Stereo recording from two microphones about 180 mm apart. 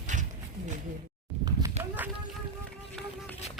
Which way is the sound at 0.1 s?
45° right (ahead or behind).